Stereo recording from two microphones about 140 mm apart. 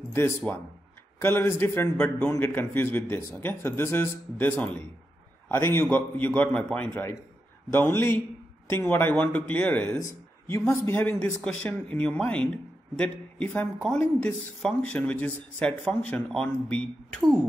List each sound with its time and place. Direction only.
1.2 s speech: 15° left (ahead or behind)